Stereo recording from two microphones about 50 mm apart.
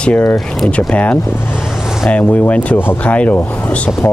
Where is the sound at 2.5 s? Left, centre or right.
Left.